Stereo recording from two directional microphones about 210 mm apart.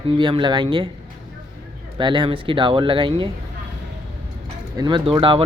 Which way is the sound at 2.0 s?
20° right (ahead or behind).